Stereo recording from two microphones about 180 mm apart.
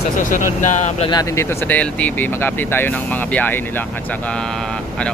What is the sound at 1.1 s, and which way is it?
Speech, 15° left (ahead or behind).